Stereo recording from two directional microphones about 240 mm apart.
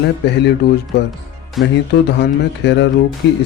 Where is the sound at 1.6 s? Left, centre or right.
Centre.